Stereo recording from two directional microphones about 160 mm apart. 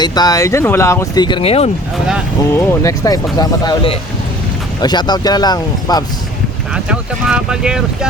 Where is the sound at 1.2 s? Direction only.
35° left (ahead or behind).